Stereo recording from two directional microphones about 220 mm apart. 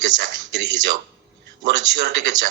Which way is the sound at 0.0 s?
50° right (ahead or behind).